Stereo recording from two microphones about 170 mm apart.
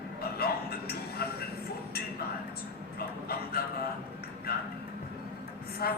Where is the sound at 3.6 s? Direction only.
65° left (ahead or behind).